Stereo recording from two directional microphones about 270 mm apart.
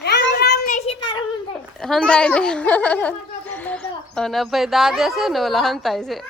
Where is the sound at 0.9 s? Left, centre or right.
Centre.